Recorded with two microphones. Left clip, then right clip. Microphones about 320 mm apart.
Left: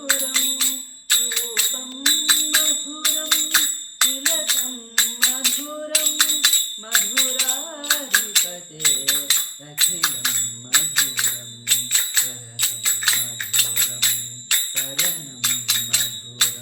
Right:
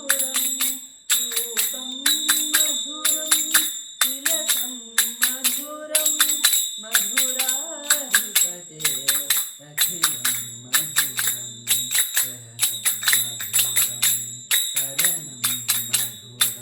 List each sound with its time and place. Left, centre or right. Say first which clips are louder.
0.1 s bicycle bell: left 4 dB; centre
2.0 s music: left 4 dB; centre
7.9 s a sound: left 2 dB; centre
11.7 s jingle bell: left 3 dB; centre